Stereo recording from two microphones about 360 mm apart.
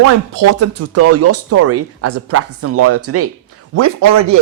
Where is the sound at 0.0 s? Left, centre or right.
Right.